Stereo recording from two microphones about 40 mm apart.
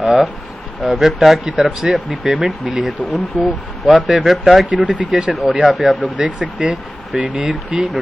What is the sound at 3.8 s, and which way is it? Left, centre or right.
Speech, centre.